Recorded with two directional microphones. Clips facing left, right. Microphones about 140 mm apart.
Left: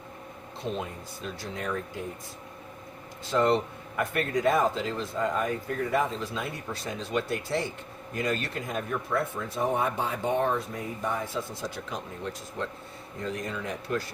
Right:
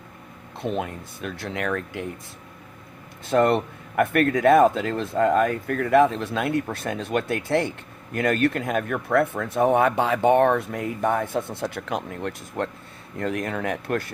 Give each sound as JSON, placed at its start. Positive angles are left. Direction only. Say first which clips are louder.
{"t": 0.6, "sound": "speech", "louder": "right 6 dB", "side_deg": -65}
{"t": 3.2, "sound": "speech", "louder": "right 5 dB", "side_deg": -55}